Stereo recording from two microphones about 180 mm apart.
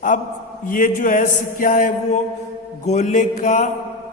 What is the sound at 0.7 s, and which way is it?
A woman's voice, 50° left (ahead or behind).